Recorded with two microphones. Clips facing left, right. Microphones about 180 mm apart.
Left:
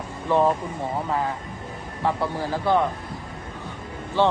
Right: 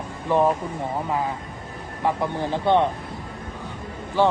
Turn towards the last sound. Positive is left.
turn(degrees=-10)  # may be behind; listen again after turning